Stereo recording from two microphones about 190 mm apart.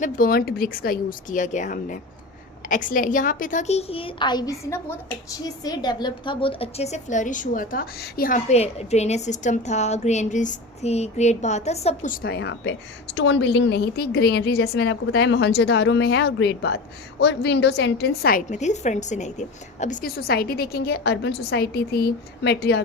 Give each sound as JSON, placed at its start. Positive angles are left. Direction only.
{"t": 0.0, "sound": "a woman's voice", "side_deg": 50}
{"t": 12.1, "sound": "a woman's voice", "side_deg": 55}
{"t": 13.1, "sound": "a woman's voice", "side_deg": 75}